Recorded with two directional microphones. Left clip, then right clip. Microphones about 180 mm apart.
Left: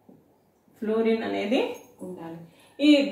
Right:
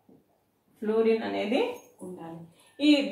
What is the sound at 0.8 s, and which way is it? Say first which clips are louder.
Speech: even; 5° left (ahead or behind).